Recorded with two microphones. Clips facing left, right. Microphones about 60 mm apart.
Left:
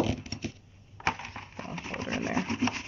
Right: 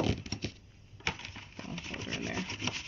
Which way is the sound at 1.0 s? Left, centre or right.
Left.